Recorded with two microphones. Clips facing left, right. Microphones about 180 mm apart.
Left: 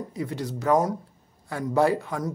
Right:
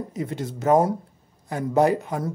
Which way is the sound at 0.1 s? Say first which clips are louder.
Right 1 dB; 20° right (ahead or behind).